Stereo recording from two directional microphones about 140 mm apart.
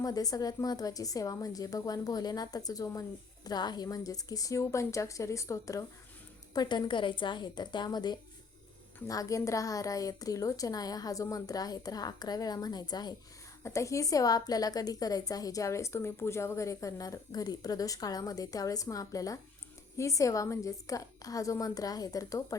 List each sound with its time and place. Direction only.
0.0 s a woman's voice: 25° left (ahead or behind)